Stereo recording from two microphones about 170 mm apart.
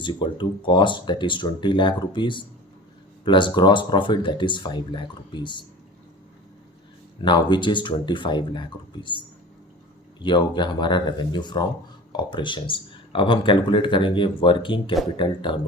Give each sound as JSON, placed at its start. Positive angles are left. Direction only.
{"t": 0.0, "sound": "speech", "side_deg": 30}
{"t": 7.2, "sound": "speech", "side_deg": 30}